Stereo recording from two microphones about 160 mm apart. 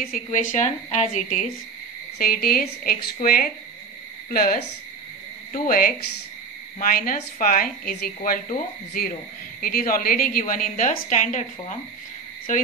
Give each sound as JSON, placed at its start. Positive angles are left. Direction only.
{"t": 0.1, "sound": "speech", "side_deg": 55}
{"t": 2.1, "sound": "a woman's voice", "side_deg": 70}